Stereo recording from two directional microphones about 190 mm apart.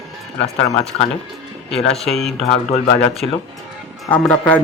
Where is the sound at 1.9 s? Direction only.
Centre (ahead or behind).